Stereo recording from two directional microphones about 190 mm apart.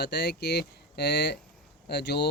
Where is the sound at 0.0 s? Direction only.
60° left (ahead or behind).